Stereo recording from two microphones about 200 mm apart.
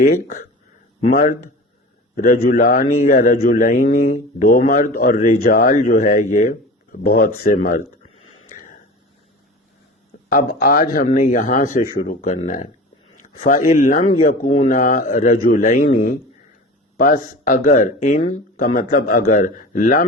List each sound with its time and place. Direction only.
0.1 s speech: 45° left (ahead or behind)
8.5 s a sound: 40° left (ahead or behind)
10.2 s speech: 45° left (ahead or behind)
13.1 s a sound: 40° left (ahead or behind)
13.8 s speech: 45° left (ahead or behind)
17.0 s speech: 45° left (ahead or behind)